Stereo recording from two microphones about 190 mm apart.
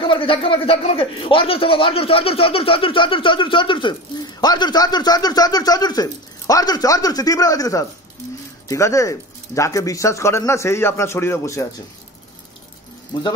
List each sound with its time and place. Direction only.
0.0 s a man's voice: 25° left (ahead or behind)
13.1 s a man's voice: 20° left (ahead or behind)